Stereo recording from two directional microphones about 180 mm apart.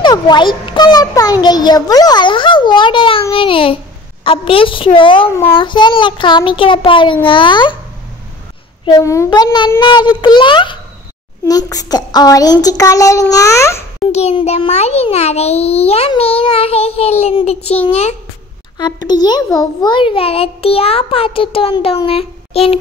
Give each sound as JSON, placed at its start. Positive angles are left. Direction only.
{"t": 0.0, "sound": "a child's voice", "side_deg": 25}
{"t": 5.3, "sound": "a child's voice", "side_deg": 15}
{"t": 5.6, "sound": "a child's voice", "side_deg": 25}
{"t": 8.8, "sound": "a child's voice", "side_deg": 20}
{"t": 14.1, "sound": "a child's voice", "side_deg": 35}
{"t": 18.8, "sound": "a child's voice", "side_deg": 25}